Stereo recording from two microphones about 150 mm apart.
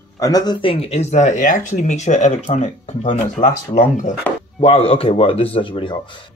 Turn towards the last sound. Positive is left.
turn(degrees=35)  # may be behind; listen again after turning